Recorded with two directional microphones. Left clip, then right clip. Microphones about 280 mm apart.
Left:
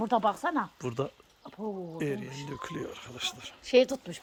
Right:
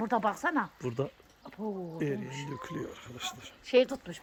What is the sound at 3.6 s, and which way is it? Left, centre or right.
Speech, left.